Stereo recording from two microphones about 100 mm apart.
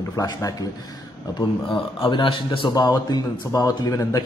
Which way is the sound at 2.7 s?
40° left (ahead or behind).